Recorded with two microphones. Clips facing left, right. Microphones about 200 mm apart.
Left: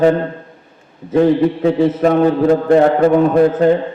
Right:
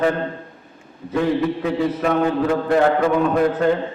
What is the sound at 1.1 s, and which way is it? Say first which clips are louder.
Mantra: left 7 dB; 35° left (ahead or behind).